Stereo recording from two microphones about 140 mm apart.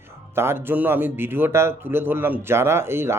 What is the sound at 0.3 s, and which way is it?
Speech, 15° right (ahead or behind).